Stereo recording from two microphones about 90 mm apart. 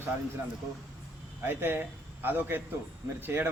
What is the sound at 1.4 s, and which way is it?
A man's voice, 25° right (ahead or behind).